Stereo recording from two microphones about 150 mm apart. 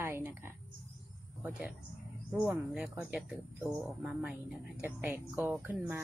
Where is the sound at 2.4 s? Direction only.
5° right (ahead or behind).